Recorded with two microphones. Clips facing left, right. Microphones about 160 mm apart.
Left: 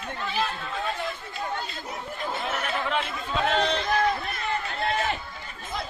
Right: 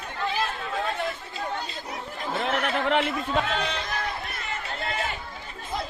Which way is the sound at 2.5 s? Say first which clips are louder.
Right 6 dB; 65° right (ahead or behind).